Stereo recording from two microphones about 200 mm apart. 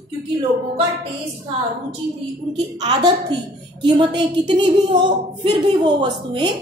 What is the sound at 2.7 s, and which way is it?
A woman's voice, 20° right (ahead or behind).